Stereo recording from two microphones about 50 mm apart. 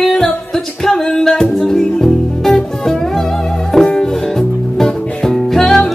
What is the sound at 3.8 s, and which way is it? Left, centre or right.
Music, centre.